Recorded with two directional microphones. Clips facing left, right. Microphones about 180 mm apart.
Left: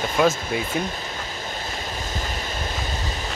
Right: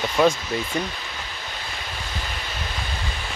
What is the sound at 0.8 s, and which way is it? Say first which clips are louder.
Wind: left 2 dB; 45° left (ahead or behind).